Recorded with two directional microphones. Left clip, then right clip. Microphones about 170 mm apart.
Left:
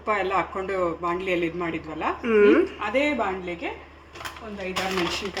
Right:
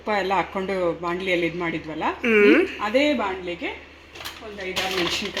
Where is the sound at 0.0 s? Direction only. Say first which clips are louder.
Right 1 dB; 40° right (ahead or behind).